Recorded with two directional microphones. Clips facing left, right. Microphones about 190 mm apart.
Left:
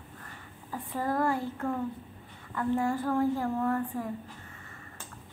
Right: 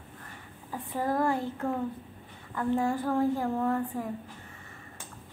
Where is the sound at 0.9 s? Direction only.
15° right (ahead or behind).